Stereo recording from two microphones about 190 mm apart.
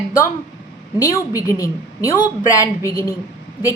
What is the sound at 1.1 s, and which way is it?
A woman's voice, 15° left (ahead or behind).